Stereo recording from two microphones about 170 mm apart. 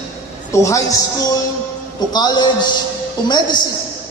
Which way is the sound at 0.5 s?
20° left (ahead or behind).